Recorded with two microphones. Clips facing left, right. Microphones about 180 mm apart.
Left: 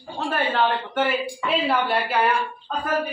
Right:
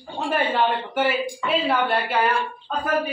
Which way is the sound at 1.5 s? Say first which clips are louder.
Even; 5° left (ahead or behind).